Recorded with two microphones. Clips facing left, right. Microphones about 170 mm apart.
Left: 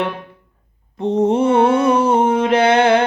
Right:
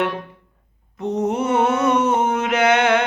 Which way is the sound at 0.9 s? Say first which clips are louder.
Left 6 dB; 30° left (ahead or behind).